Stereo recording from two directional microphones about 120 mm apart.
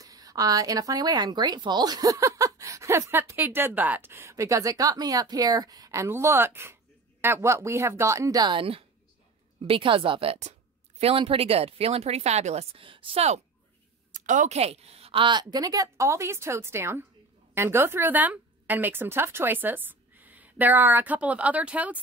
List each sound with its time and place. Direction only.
0.0 s speech: 30° right (ahead or behind); by 12.8 s 65° right (ahead or behind)
12.8 s speech: 45° right (ahead or behind)
14.1 s a woman's voice: 90° right; by 22.0 s 10° right (ahead or behind)